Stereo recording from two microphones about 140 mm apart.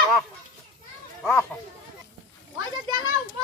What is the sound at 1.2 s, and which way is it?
Children playing, 5° left (ahead or behind).